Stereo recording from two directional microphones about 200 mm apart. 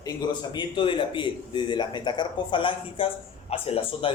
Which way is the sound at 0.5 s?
25° left (ahead or behind).